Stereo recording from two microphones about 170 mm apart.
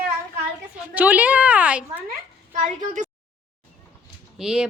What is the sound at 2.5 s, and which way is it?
Speech, 50° right (ahead or behind).